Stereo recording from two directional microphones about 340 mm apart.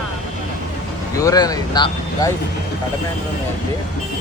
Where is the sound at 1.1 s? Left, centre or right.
Centre.